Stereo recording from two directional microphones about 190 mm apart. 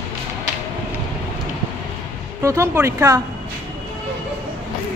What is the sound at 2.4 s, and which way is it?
Speech, 15° right (ahead or behind).